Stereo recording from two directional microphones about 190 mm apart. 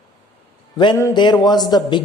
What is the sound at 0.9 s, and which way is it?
A man's voice, 20° left (ahead or behind).